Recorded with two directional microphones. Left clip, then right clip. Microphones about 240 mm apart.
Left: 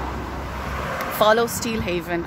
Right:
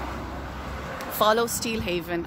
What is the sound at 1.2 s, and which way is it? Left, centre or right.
Speech, centre.